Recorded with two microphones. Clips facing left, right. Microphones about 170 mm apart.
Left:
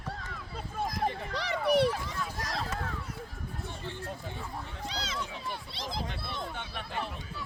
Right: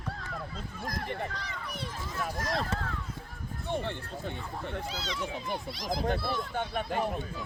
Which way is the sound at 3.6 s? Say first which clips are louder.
Right 7 dB; 65° right (ahead or behind).